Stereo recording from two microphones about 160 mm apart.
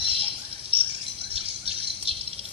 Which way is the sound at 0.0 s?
35° right (ahead or behind).